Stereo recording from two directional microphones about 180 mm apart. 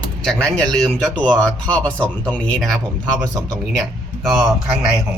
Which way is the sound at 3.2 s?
20° right (ahead or behind).